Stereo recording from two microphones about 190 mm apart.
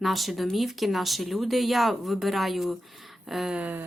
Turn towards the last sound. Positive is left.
turn(degrees=-10)  # may be behind; listen again after turning